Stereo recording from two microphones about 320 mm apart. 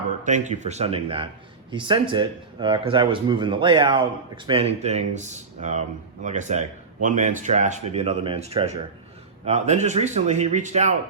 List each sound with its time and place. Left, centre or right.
0.3 s speech: right